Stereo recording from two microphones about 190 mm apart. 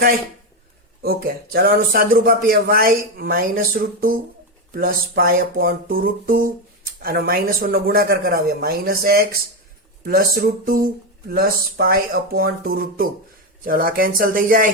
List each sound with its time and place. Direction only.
1.0 s speech: 55° right (ahead or behind)